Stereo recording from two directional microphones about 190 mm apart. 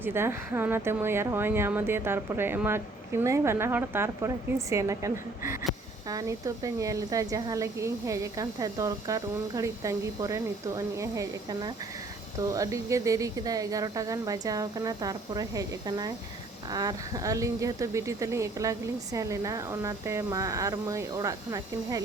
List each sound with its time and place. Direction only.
0.0 s a woman's voice: 10° right (ahead or behind)